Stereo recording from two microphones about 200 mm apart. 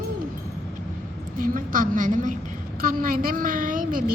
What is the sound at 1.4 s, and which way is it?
A woman's voice, 45° right (ahead or behind).